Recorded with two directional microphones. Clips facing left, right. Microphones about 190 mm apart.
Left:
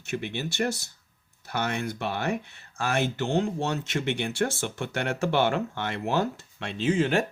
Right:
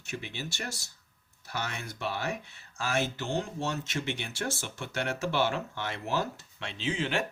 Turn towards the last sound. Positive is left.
turn(degrees=45)  # may be behind; listen again after turning